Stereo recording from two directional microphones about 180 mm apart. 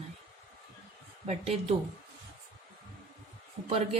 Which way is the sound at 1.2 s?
35° right (ahead or behind).